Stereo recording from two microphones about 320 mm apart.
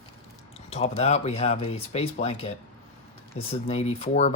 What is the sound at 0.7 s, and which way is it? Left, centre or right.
Speech, centre.